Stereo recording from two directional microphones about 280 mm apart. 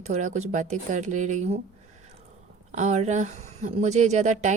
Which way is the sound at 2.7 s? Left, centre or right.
Right.